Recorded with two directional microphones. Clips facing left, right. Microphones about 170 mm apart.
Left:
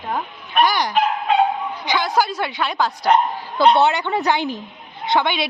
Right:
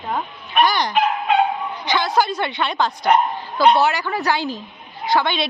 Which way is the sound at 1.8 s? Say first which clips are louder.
Right 1 dB; 10° left (ahead or behind).